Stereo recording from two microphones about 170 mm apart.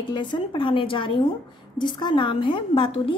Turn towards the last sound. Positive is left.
turn(degrees=30)  # may be behind; listen again after turning